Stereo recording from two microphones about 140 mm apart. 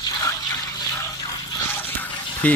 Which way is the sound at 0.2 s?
25° left (ahead or behind).